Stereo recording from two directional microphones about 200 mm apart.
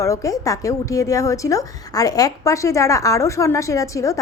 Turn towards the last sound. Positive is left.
turn(degrees=15)  # may be behind; listen again after turning